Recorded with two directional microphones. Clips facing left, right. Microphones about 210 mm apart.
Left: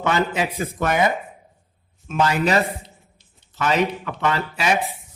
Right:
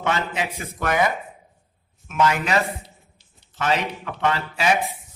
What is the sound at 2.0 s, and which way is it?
Speech, 35° left (ahead or behind).